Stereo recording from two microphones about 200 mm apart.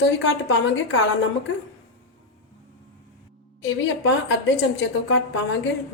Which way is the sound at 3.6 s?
70° left (ahead or behind).